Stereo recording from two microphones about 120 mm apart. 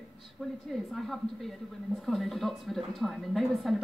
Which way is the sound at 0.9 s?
Centre (ahead or behind).